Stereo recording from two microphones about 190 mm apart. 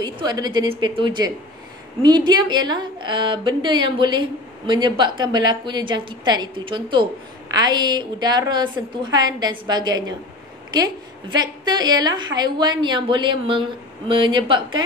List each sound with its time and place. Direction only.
0.0 s a woman's voice: 20° right (ahead or behind)